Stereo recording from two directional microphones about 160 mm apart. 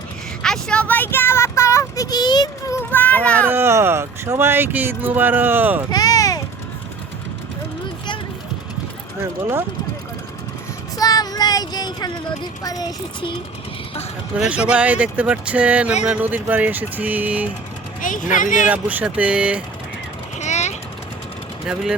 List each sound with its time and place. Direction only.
0.4 s a sound: 5° left (ahead or behind)
3.5 s speech: 15° right (ahead or behind)
5.9 s a sound: 25° left (ahead or behind)
9.2 s speech: 15° right (ahead or behind)
10.9 s speech: 25° left (ahead or behind)
14.3 s speech: 5° right (ahead or behind)
18.0 s speech: 55° left (ahead or behind)
18.7 s speech: 10° right (ahead or behind)
20.4 s vehicle: 45° left (ahead or behind)